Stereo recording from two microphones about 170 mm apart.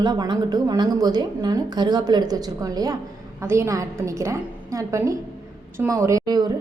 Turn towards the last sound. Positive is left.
turn(degrees=-25)  # may be behind; listen again after turning